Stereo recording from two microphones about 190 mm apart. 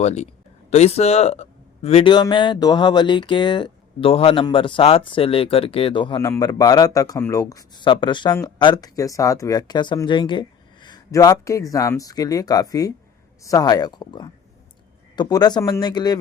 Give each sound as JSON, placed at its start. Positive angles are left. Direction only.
{"t": 0.0, "sound": "speech", "side_deg": 35}